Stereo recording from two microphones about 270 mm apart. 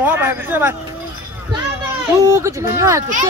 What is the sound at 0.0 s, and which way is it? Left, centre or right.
Speech, centre.